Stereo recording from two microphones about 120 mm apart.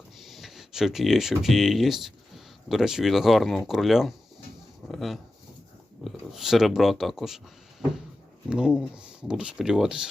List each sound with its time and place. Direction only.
0.2 s speech: centre (ahead or behind)